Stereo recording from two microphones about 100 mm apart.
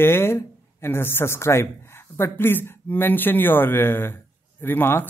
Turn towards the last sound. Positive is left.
turn(degrees=20)  # may be behind; listen again after turning